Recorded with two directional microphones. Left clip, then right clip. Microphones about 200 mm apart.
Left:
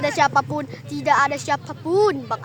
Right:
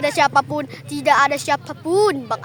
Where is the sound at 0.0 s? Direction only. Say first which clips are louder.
Right 2 dB; 35° right (ahead or behind).